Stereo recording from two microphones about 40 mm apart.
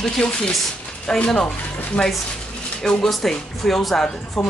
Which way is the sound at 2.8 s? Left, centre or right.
Centre.